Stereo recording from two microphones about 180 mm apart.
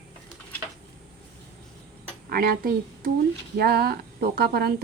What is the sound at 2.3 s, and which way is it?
A woman's voice, 55° right (ahead or behind).